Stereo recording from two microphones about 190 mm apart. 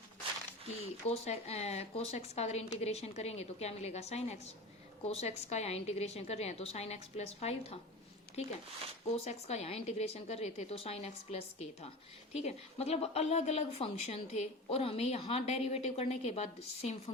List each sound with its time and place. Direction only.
1.0 s a woman's voice: 35° left (ahead or behind)
9.0 s a woman's voice: 35° left (ahead or behind)